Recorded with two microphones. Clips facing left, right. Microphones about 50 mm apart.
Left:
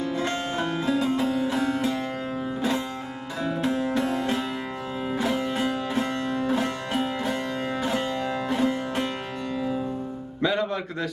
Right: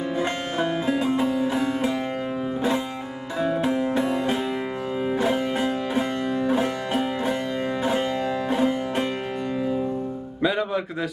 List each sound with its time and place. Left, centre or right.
0.2 s music: right
10.4 s music: centre